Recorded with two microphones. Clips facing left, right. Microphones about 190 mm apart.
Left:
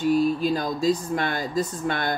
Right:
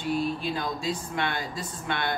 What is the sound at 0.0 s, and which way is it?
Speech, 40° left (ahead or behind).